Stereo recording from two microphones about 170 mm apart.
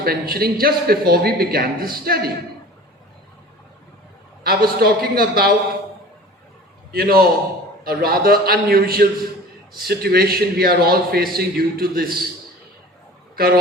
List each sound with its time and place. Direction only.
0.0 s a man's voice: 60° right (ahead or behind)
4.4 s a man's voice: 65° right (ahead or behind)
6.9 s a man's voice: 60° right (ahead or behind)